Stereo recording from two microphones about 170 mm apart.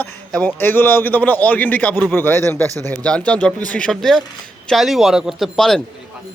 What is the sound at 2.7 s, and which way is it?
Speech, 20° right (ahead or behind).